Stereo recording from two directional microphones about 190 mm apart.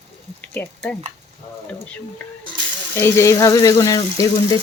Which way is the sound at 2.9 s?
15° left (ahead or behind).